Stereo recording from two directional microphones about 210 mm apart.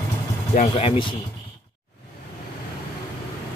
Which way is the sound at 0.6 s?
30° left (ahead or behind).